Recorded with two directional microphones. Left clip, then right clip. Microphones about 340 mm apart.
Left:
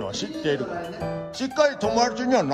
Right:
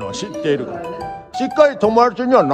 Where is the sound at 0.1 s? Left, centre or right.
Centre.